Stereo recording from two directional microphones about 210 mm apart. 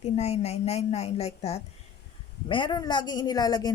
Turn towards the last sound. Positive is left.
turn(degrees=20)  # may be behind; listen again after turning